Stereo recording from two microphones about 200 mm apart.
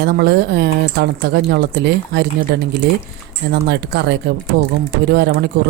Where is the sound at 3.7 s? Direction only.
55° right (ahead or behind).